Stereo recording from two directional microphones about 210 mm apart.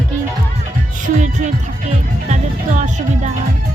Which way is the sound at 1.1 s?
35° right (ahead or behind).